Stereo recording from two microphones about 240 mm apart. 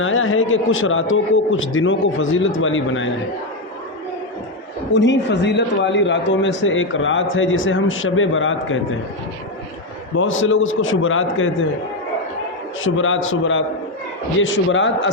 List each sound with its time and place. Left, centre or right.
0.0 s a man's voice: left
4.9 s a man's voice: left
10.2 s a man's voice: left
12.8 s a man's voice: left